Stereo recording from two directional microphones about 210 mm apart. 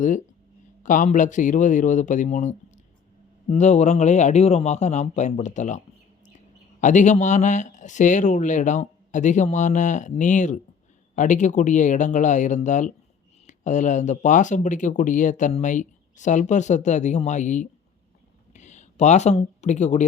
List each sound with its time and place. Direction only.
0.0 s speech: 40° left (ahead or behind)